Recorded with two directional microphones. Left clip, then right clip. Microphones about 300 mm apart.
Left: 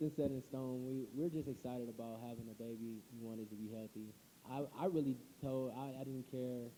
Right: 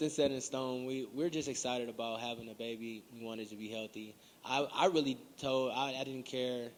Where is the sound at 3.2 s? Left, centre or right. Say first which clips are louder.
Right 7 dB; right.